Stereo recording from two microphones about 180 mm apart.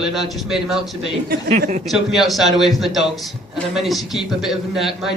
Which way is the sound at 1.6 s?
45° right (ahead or behind).